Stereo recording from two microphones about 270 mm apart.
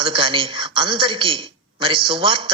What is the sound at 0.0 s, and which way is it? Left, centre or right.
A man's voice, centre.